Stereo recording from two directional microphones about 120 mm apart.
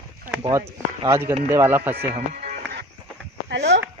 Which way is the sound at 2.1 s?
90° right.